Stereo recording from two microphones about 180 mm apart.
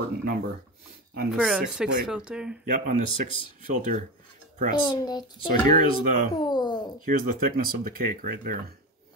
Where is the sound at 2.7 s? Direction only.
45° right (ahead or behind).